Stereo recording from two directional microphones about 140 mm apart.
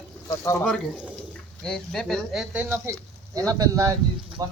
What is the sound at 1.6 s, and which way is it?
Speech, 5° left (ahead or behind).